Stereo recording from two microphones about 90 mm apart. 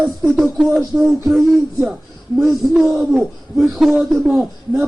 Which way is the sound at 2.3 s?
5° right (ahead or behind).